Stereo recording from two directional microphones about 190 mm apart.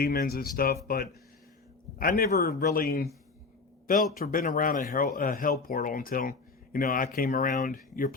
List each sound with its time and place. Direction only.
0.0 s speech: 55° left (ahead or behind)
2.0 s speech: 50° left (ahead or behind)